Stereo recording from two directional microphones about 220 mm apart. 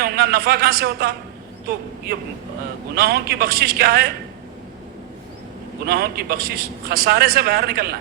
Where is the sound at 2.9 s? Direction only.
45° right (ahead or behind).